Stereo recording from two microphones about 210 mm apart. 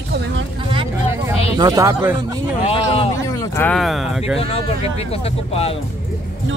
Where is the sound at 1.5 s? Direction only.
15° right (ahead or behind).